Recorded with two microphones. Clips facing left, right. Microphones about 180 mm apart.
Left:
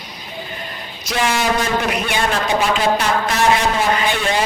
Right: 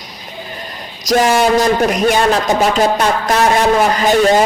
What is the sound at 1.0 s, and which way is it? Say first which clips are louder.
Speech: right 7 dB; 40° right (ahead or behind).